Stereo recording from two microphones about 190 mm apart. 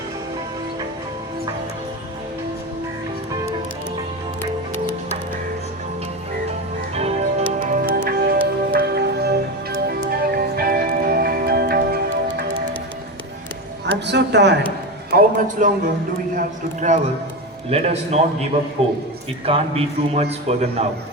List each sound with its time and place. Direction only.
6.9 s music: 35° right (ahead or behind); by 11.9 s 55° right (ahead or behind)
14.1 s a woman's voice: 65° right (ahead or behind)
15.1 s a man's voice: 45° right (ahead or behind)
16.9 s a man's voice: 40° right (ahead or behind)